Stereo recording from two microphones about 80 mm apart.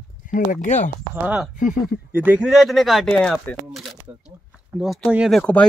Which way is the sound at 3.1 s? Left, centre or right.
Centre.